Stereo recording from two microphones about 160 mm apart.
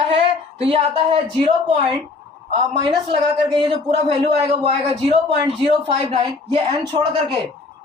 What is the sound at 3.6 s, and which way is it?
A man's voice, 35° right (ahead or behind).